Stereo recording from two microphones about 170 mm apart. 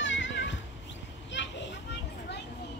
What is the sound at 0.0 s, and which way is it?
Music, 90° left.